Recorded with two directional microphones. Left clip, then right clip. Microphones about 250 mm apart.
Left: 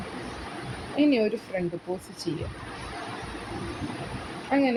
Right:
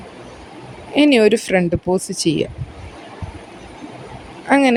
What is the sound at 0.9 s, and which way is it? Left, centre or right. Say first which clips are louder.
Speech: right 11 dB; right.